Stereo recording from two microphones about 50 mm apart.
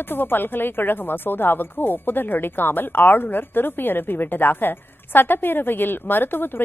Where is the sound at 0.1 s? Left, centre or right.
Left.